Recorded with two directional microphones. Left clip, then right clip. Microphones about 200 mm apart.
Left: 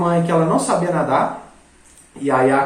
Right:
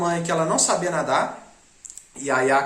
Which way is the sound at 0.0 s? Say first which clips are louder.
Left 5 dB; 15° right (ahead or behind).